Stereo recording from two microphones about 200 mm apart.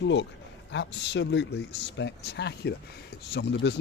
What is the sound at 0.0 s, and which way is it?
Speech, 65° left (ahead or behind).